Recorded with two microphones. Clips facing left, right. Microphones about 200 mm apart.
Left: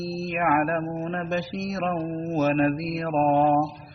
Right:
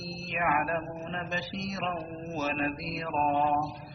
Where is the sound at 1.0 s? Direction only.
50° left (ahead or behind).